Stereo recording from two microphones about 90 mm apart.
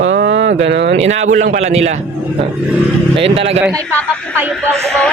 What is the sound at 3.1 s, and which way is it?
Speech, 90° right.